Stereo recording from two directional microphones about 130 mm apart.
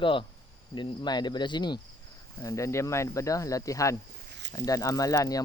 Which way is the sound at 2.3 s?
25° left (ahead or behind).